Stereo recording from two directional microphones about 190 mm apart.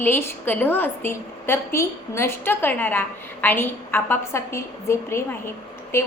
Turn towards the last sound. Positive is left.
turn(degrees=10)  # may be behind; listen again after turning